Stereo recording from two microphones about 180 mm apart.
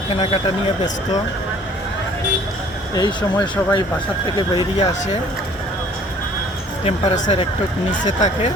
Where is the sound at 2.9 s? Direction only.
25° left (ahead or behind).